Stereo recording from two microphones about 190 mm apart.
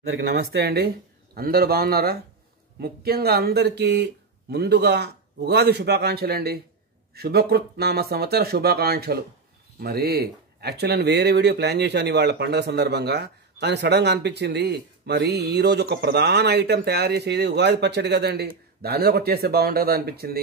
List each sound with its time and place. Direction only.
0.3 s speech: 60° right (ahead or behind)